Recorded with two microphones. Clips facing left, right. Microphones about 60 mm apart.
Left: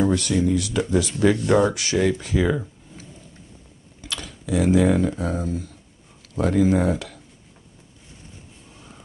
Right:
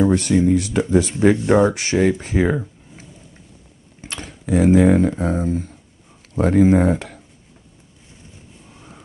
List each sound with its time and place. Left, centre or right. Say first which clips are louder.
0.1 s speech: right 5 dB; right
4.0 s speech: right 1 dB; right
8.6 s a sound: right 4 dB; centre